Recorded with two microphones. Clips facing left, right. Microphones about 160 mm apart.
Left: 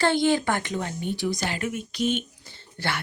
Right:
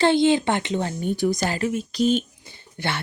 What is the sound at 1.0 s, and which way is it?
Speech, 45° right (ahead or behind).